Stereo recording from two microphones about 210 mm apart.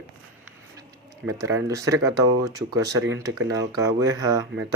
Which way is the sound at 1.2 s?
15° right (ahead or behind).